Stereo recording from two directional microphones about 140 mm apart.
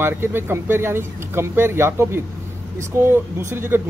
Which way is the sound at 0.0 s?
15° right (ahead or behind).